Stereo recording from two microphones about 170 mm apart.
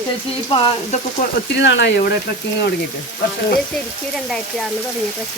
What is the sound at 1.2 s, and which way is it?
Speech, 60° left (ahead or behind).